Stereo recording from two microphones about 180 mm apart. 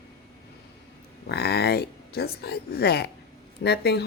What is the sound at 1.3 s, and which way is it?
Speech, 65° left (ahead or behind).